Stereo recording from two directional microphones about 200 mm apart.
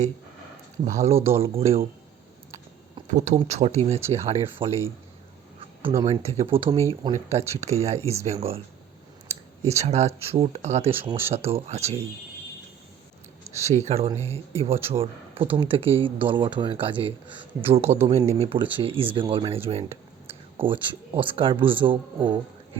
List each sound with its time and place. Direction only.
0.9 s speech: 35° right (ahead or behind)
3.1 s speech: 35° right (ahead or behind)
6.1 s speech: 30° right (ahead or behind)
13.6 s speech: 35° right (ahead or behind)
20.2 s a sound: 25° right (ahead or behind)
21.2 s speech: 25° right (ahead or behind)